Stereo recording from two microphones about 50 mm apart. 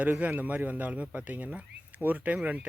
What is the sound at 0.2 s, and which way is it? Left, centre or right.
Speech, right.